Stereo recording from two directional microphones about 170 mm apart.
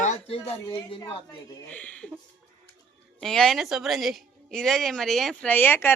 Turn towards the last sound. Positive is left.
turn(degrees=10)  # may be behind; listen again after turning